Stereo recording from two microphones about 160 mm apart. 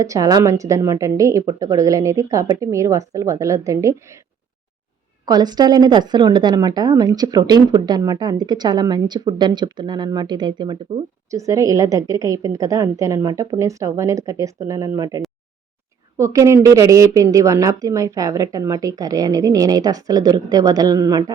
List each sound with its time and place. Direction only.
0.0 s a woman's voice: 20° right (ahead or behind)
5.2 s a woman's voice: 25° right (ahead or behind)